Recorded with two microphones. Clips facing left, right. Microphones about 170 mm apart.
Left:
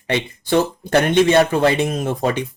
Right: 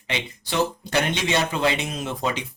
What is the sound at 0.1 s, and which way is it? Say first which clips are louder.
Speech: left 10 dB; 50° left (ahead or behind).